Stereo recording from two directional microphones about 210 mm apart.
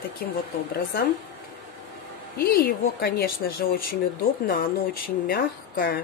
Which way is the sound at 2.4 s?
45° left (ahead or behind).